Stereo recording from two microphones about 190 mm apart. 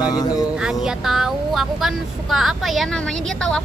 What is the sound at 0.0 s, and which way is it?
Speech, 20° left (ahead or behind).